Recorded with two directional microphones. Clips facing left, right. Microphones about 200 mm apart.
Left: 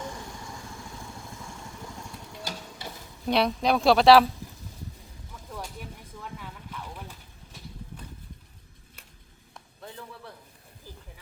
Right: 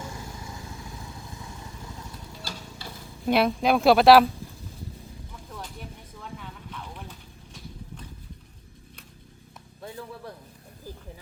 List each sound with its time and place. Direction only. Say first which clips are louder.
2.4 s a sound: left 3 dB; 20° left (ahead or behind)
3.2 s speech: right 2 dB; 5° right (ahead or behind)
5.5 s vehicle: left 2 dB; 10° left (ahead or behind)